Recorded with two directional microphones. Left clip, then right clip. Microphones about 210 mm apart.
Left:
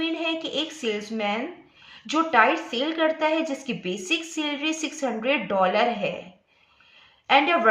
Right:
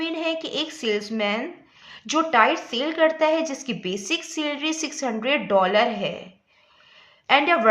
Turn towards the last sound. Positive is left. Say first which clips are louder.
# right 1 dB
turn(degrees=-35)  # may be behind; listen again after turning